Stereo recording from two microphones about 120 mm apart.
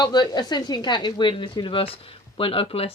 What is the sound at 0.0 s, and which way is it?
A woman's voice, 35° left (ahead or behind).